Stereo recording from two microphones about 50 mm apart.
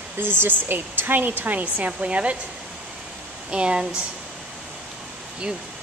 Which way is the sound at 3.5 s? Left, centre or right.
Centre.